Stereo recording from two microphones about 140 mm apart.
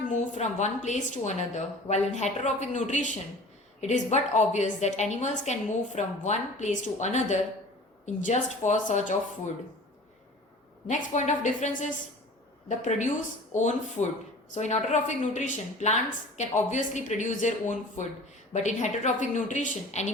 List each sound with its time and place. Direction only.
0.1 s a woman's voice: 60° left (ahead or behind)
10.8 s a woman's voice: 60° left (ahead or behind)